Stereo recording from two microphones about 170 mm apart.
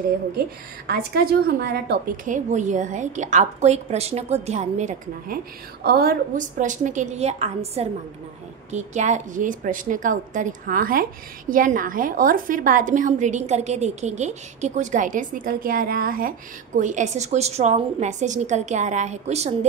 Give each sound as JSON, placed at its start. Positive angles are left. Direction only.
{"t": 0.8, "sound": "a woman's voice", "side_deg": -70}
{"t": 2.2, "sound": "a woman's voice", "side_deg": -45}
{"t": 5.9, "sound": "a woman's voice", "side_deg": -65}